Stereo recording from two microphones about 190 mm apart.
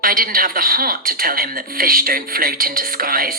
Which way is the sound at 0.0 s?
50° right (ahead or behind).